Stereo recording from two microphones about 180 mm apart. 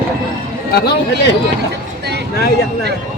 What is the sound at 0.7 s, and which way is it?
Speech, 70° left (ahead or behind).